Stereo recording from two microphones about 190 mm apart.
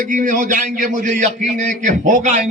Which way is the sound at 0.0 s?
40° right (ahead or behind).